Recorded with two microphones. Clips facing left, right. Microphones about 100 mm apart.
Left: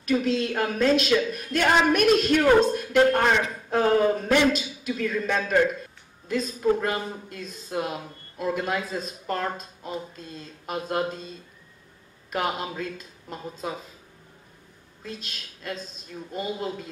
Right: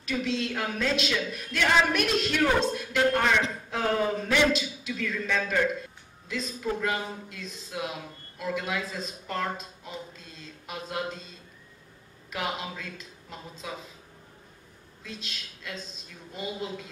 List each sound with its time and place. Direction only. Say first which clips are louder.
0.0 s speech: left 6 dB; 45° left (ahead or behind)
15.0 s speech: left 3 dB; 45° left (ahead or behind)